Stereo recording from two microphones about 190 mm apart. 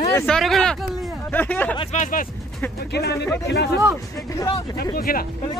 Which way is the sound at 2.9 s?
60° left (ahead or behind).